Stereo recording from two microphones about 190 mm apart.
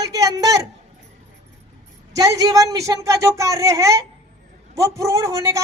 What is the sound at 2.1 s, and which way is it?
Speech, 20° right (ahead or behind).